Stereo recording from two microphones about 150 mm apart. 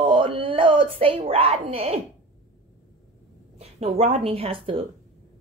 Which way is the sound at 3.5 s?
40° right (ahead or behind).